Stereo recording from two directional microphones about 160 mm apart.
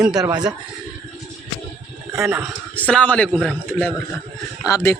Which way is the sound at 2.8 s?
10° left (ahead or behind).